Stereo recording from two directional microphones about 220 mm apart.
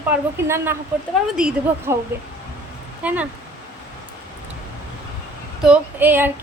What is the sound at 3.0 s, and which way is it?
Speech, 5° right (ahead or behind).